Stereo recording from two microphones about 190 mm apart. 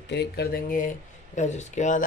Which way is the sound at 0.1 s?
60° left (ahead or behind).